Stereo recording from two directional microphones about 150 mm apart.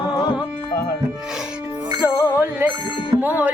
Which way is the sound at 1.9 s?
20° left (ahead or behind).